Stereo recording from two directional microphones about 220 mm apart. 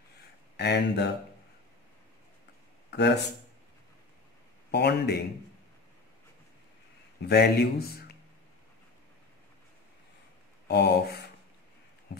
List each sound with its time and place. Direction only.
0.6 s speech: 50° left (ahead or behind)
2.9 s a sound: 50° left (ahead or behind)
4.6 s speech: 50° left (ahead or behind)
7.2 s speech: 50° left (ahead or behind)
10.7 s speech: 50° left (ahead or behind)